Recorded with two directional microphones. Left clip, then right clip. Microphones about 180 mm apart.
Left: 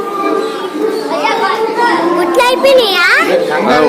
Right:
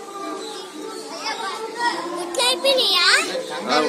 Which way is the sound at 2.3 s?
25° left (ahead or behind).